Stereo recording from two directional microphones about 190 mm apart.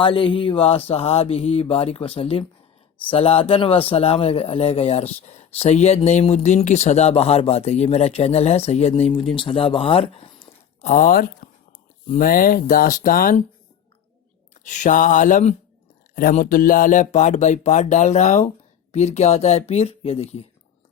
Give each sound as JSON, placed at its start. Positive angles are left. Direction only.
{"t": 0.0, "sound": "speech", "side_deg": 25}
{"t": 14.6, "sound": "speech", "side_deg": 40}